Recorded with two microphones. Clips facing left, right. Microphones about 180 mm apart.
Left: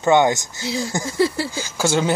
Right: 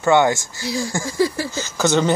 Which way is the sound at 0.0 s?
20° left (ahead or behind).